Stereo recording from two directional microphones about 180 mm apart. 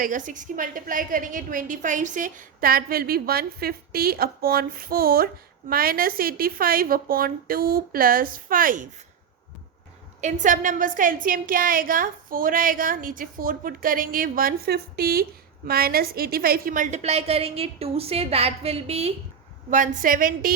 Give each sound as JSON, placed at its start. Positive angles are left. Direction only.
{"t": 0.0, "sound": "a woman's voice", "side_deg": -45}
{"t": 10.2, "sound": "a woman's voice", "side_deg": -45}
{"t": 20.0, "sound": "a woman's voice", "side_deg": -50}